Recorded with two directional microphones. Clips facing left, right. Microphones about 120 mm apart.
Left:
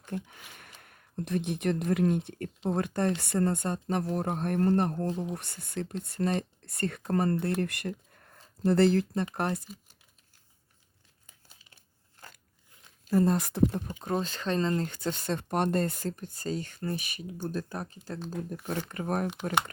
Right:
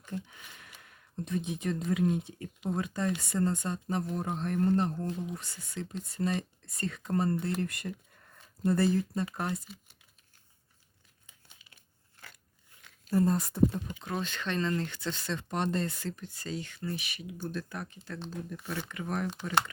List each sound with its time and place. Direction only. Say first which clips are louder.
0.3 s a sound: left 1 dB; 55° left (ahead or behind)
1.2 s speech: left 4 dB; 70° left (ahead or behind)
5.0 s speech: left 4 dB; 30° left (ahead or behind)
5.3 s speech: left 4 dB; 60° left (ahead or behind)
8.6 s speech: left 4 dB; 80° left
9.3 s speech: left 4 dB; 60° left (ahead or behind)
11.3 s crumpling: left 1 dB; 35° left (ahead or behind)
13.1 s speech: left 2 dB; 85° left
13.8 s speech: left 4 dB; 40° left (ahead or behind)